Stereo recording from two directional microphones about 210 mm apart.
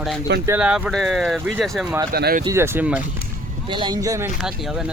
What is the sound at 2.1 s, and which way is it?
Speech, 50° right (ahead or behind).